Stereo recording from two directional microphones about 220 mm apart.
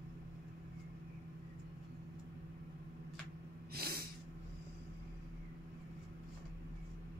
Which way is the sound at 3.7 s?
45° right (ahead or behind).